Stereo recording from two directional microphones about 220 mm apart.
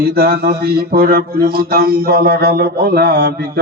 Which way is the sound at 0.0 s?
40° right (ahead or behind).